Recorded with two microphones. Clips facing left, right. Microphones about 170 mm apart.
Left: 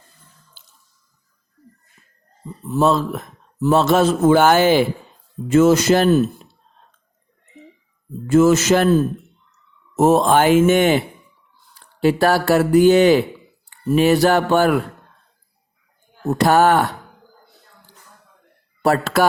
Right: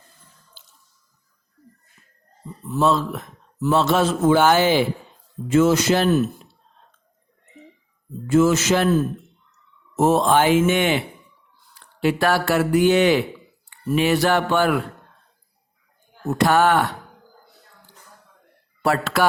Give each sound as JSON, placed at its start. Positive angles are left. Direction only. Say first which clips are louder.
{"t": 2.6, "sound": "a man's voice", "louder": "left 3 dB", "side_deg": 40}
{"t": 8.3, "sound": "a man's voice", "louder": "left 4 dB", "side_deg": 45}
{"t": 9.9, "sound": "a man's voice", "louder": "left 3 dB", "side_deg": 45}
{"t": 16.2, "sound": "speech", "louder": "left 3 dB", "side_deg": 35}
{"t": 18.8, "sound": "speech", "louder": "left 3 dB", "side_deg": 40}